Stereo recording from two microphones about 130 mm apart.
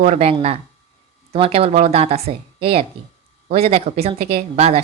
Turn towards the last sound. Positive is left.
turn(degrees=-50)  # may be behind; listen again after turning